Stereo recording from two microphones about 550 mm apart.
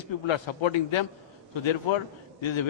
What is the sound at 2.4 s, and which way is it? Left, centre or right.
Speech, left.